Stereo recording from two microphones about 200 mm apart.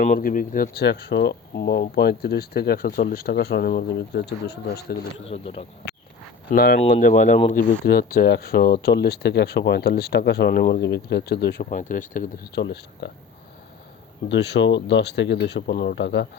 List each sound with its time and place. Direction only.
0.0 s speech: 45° left (ahead or behind)
5.3 s speech: 25° left (ahead or behind)
6.5 s speech: 50° left (ahead or behind)
11.6 s speech: 40° left (ahead or behind); by 13.1 s 60° left (ahead or behind)
14.3 s speech: 60° left (ahead or behind)